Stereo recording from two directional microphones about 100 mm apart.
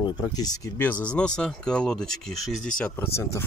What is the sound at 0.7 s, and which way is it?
Speech, 15° left (ahead or behind).